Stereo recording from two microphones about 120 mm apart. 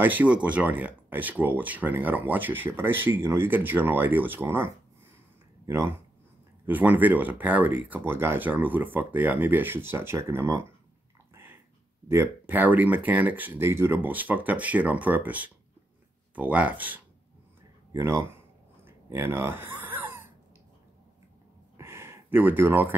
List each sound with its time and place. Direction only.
0.0 s speech: 15° right (ahead or behind)
6.6 s speech: 15° right (ahead or behind)
12.1 s speech: 20° right (ahead or behind)
17.9 s speech: 25° right (ahead or behind)
18.9 s a sound: 20° right (ahead or behind)
21.7 s a sound: 20° right (ahead or behind)